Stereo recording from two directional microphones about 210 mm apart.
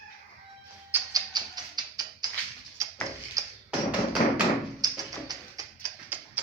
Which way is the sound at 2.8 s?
15° right (ahead or behind).